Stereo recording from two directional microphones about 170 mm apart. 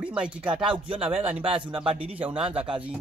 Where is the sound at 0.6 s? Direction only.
30° right (ahead or behind).